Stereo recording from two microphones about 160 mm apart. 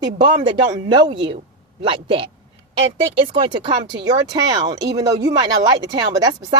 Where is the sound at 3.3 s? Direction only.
30° right (ahead or behind).